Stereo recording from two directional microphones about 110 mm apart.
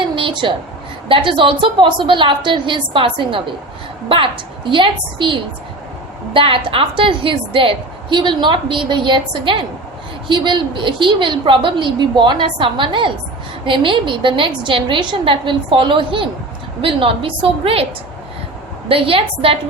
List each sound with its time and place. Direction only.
0.2 s a woman's voice: 45° right (ahead or behind)
4.7 s a woman's voice: 50° right (ahead or behind)
18.9 s a woman's voice: 55° right (ahead or behind)